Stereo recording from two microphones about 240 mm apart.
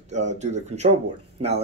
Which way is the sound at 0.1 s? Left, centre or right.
Right.